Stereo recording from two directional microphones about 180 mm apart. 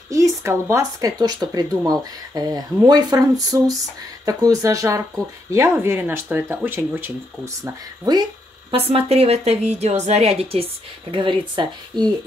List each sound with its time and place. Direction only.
0.1 s speech: 15° right (ahead or behind)
7.6 s speech: 20° right (ahead or behind)
8.7 s a woman's voice: 30° right (ahead or behind)